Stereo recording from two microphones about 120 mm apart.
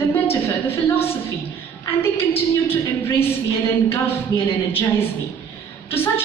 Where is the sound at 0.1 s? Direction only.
20° left (ahead or behind).